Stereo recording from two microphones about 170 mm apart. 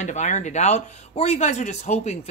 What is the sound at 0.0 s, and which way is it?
Speech, 45° left (ahead or behind).